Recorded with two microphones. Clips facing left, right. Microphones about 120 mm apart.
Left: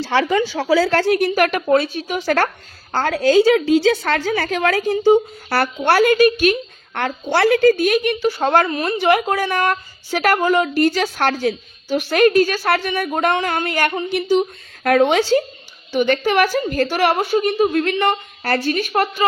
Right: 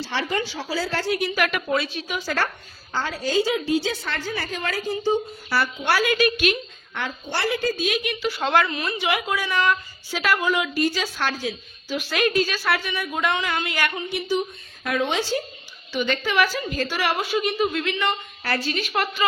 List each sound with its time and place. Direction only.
0.0 s a woman's voice: 85° left; by 2.3 s 45° left (ahead or behind)
2.3 s a woman's voice: 60° left (ahead or behind)
6.1 s a woman's voice: 40° left (ahead or behind)
6.9 s speech: 60° left (ahead or behind)
15.9 s a woman's voice: 55° left (ahead or behind)